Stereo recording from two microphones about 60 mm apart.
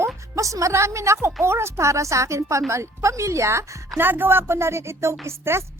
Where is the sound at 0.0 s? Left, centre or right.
Right.